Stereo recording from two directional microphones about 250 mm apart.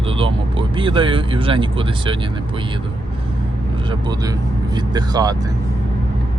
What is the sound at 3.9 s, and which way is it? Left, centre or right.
Speech, centre.